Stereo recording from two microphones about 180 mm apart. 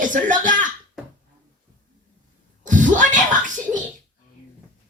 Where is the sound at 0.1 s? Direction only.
45° right (ahead or behind).